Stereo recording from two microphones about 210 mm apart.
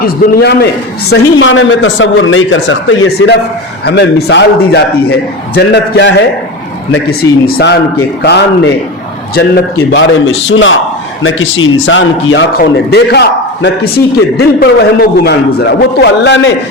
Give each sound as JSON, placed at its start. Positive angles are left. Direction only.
{"t": 0.0, "sound": "a man's voice", "side_deg": 50}
{"t": 1.1, "sound": "a man's voice", "side_deg": 65}
{"t": 10.5, "sound": "a man's voice", "side_deg": 65}